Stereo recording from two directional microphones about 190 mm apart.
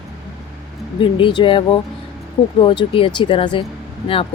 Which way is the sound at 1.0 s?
25° left (ahead or behind).